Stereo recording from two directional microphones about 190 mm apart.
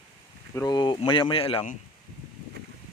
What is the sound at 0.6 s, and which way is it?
Speech, 20° left (ahead or behind).